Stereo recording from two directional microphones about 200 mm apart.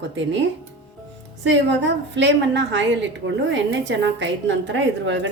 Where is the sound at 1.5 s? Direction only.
65° right (ahead or behind).